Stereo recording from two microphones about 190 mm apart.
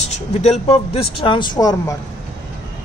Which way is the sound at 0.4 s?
35° left (ahead or behind).